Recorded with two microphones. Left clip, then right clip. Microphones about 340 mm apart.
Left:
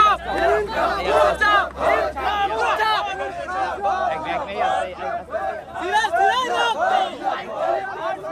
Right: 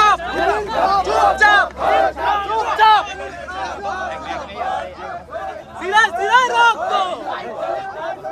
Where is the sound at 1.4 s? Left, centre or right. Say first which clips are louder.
Right 5 dB; centre.